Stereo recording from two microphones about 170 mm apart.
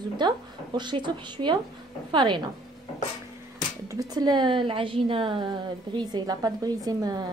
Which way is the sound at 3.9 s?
20° right (ahead or behind).